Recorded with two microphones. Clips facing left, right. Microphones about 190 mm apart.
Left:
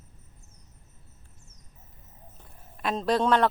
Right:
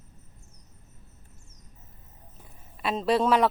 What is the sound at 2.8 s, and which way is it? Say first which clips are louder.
Speech: right 1 dB; 5° right (ahead or behind).